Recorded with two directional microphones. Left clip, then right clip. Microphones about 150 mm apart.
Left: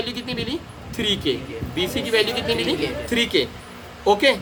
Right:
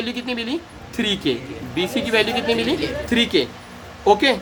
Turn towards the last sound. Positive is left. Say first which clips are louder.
# right 1 dB
turn(degrees=-50)  # may be behind; listen again after turning